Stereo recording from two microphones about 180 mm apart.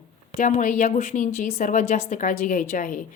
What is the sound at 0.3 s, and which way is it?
A woman's voice, 40° left (ahead or behind).